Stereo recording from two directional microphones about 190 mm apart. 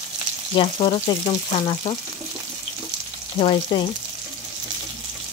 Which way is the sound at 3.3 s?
30° left (ahead or behind).